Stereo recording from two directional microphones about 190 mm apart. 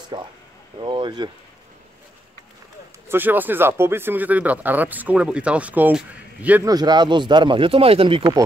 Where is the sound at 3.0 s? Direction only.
10° right (ahead or behind).